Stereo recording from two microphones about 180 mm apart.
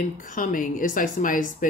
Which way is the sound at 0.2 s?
50° left (ahead or behind).